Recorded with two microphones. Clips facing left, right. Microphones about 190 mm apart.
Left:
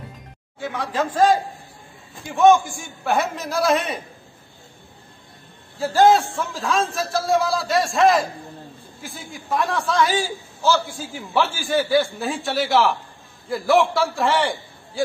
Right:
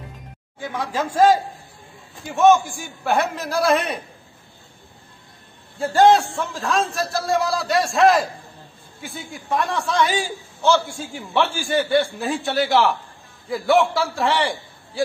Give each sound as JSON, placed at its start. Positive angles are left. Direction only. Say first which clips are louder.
{"t": 0.6, "sound": "a man's voice", "louder": "left 1 dB", "side_deg": -10}
{"t": 5.8, "sound": "a man's voice", "louder": "right 1 dB", "side_deg": 0}